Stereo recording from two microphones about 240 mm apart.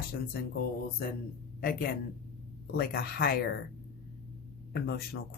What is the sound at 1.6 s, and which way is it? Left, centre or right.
Speech, left.